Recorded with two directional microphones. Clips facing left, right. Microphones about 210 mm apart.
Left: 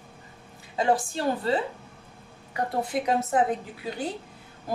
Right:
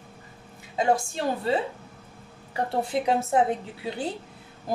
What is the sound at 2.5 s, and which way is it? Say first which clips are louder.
Speech: right 1 dB; 30° right (ahead or behind).